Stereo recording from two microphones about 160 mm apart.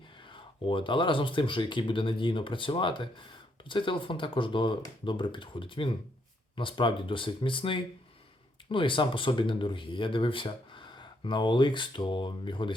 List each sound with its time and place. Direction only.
0.2 s speech: 30° left (ahead or behind)